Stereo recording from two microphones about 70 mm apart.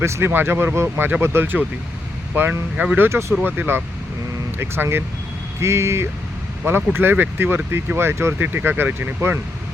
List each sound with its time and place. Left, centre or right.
0.0 s speech: right
3.4 s speech: right